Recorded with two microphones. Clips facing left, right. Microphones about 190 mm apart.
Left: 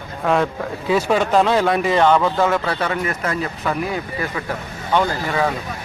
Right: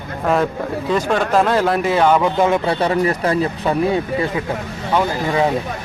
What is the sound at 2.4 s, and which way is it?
Speech, 20° right (ahead or behind).